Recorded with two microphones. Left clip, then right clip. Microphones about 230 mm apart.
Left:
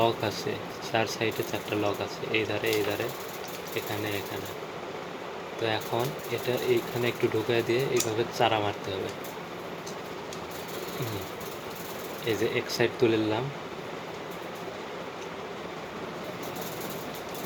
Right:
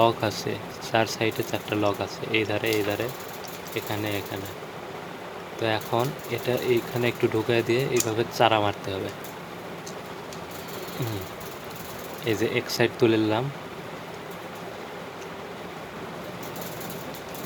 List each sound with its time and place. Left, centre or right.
0.0 s speech: right
5.6 s speech: right
12.2 s speech: right